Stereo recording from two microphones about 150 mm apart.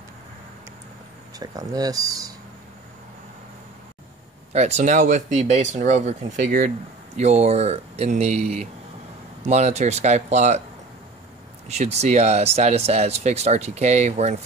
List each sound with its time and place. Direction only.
1.4 s speech: 25° right (ahead or behind)
4.5 s speech: 45° right (ahead or behind)
7.2 s speech: 45° right (ahead or behind)
11.6 s speech: 50° right (ahead or behind)